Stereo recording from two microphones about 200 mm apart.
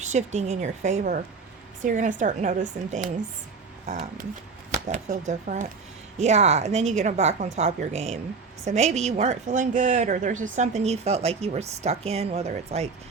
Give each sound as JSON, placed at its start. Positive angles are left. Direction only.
{"t": 0.0, "sound": "a woman's voice", "side_deg": -35}